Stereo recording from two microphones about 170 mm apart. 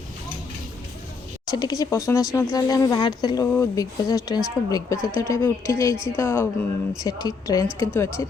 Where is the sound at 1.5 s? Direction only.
20° left (ahead or behind).